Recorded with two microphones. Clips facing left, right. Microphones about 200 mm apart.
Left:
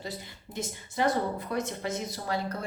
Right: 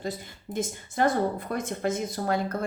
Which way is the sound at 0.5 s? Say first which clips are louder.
Right 4 dB; 50° right (ahead or behind).